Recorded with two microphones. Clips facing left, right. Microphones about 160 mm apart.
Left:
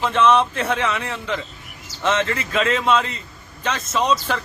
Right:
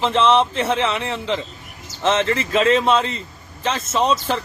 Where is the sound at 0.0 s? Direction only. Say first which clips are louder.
Right 1 dB; 30° right (ahead or behind).